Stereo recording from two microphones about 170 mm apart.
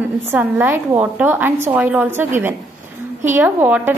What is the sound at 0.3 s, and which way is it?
A woman's voice, 10° right (ahead or behind).